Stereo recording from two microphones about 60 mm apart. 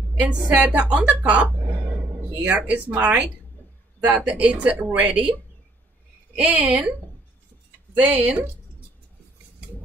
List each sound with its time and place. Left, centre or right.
0.2 s a woman's voice: right
6.3 s a woman's voice: right
8.0 s a woman's voice: right